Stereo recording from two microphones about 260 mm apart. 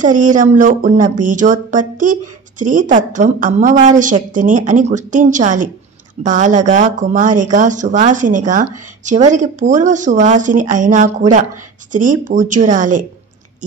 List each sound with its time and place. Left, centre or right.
0.0 s speech: right